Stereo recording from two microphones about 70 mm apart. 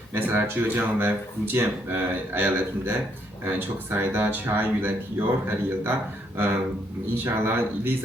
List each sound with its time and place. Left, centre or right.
0.1 s speech: right